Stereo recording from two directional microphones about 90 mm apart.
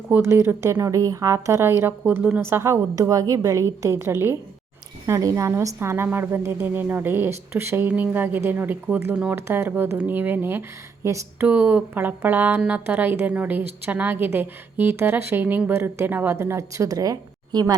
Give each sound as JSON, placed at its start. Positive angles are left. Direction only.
{"t": 0.1, "sound": "a woman's voice", "side_deg": -30}
{"t": 2.0, "sound": "speech", "side_deg": -15}
{"t": 2.4, "sound": "a woman's voice", "side_deg": -30}
{"t": 7.9, "sound": "a woman's voice", "side_deg": -20}
{"t": 11.4, "sound": "a woman's voice", "side_deg": -20}